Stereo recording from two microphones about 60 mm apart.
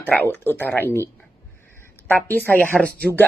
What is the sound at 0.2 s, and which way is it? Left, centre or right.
Speech, left.